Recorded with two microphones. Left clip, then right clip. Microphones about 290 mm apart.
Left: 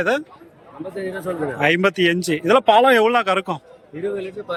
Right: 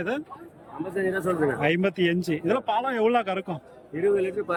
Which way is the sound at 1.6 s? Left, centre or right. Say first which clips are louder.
Left 12 dB; centre.